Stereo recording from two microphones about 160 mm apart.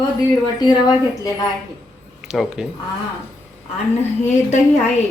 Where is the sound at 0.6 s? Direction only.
25° left (ahead or behind).